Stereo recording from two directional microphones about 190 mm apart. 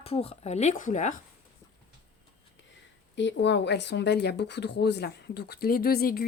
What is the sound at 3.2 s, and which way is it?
Speech, 70° left (ahead or behind).